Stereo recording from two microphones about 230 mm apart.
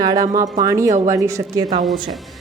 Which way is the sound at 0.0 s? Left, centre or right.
Centre.